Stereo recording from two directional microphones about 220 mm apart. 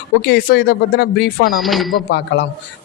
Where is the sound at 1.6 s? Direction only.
Centre (ahead or behind).